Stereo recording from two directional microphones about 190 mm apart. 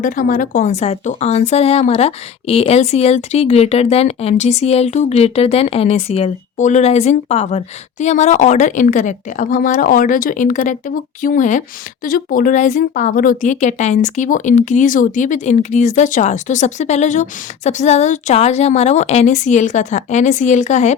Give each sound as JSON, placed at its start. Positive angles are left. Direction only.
{"t": 0.0, "sound": "a woman's voice", "side_deg": 45}